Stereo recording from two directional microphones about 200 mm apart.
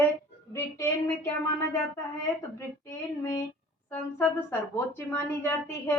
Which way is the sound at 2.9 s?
15° left (ahead or behind).